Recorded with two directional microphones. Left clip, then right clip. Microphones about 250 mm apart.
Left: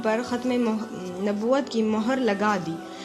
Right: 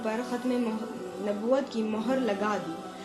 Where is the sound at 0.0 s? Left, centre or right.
Left.